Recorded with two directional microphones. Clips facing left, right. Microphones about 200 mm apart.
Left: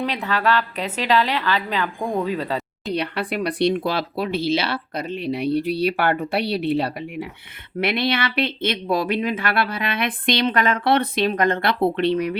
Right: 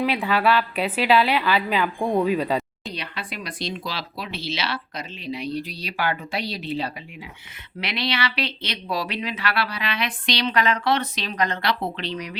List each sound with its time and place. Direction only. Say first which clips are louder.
0.0 s a woman's voice: right 1 dB; 10° right (ahead or behind)
2.9 s speech: left 11 dB; 60° left (ahead or behind)
7.8 s speech: left 5 dB; 55° left (ahead or behind)